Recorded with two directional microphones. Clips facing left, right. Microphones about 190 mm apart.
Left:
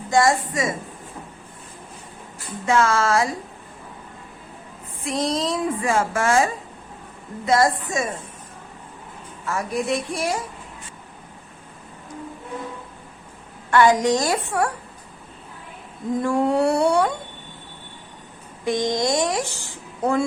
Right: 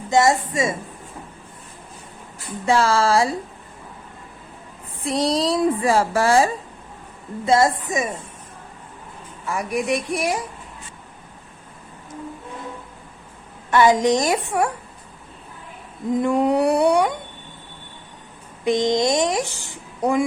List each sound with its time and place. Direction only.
0.1 s speech: 20° right (ahead or behind)
2.6 s a woman's voice: 30° right (ahead or behind)
5.0 s a woman's voice: 35° right (ahead or behind); by 8.1 s 15° right (ahead or behind)
9.5 s a sound: 15° right (ahead or behind)
13.7 s speech: 20° right (ahead or behind)
16.1 s a sound: 20° right (ahead or behind)
18.6 s speech: 20° right (ahead or behind)